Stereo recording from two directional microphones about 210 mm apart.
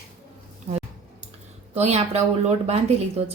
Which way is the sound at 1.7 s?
30° right (ahead or behind).